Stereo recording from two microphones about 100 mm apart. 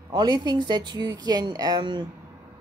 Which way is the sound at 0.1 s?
40° right (ahead or behind).